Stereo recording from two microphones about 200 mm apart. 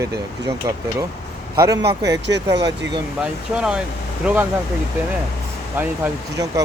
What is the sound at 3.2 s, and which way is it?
Speech, 5° right (ahead or behind).